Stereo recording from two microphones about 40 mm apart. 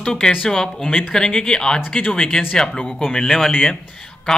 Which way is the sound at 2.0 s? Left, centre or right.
Left.